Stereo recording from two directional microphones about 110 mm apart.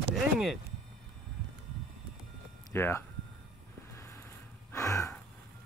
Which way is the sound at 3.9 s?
25° left (ahead or behind).